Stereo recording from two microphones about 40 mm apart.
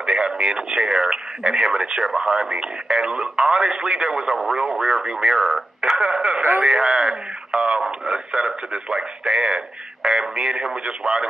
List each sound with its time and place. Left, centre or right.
0.0 s speech: centre